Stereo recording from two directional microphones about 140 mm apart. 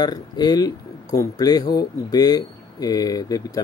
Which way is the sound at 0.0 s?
30° left (ahead or behind).